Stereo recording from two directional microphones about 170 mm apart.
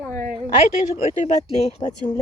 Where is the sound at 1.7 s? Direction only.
45° left (ahead or behind).